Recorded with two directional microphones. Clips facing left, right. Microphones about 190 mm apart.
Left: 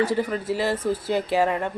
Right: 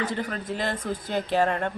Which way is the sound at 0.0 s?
10° left (ahead or behind).